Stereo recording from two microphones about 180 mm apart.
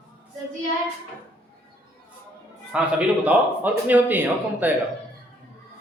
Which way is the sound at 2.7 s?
5° right (ahead or behind).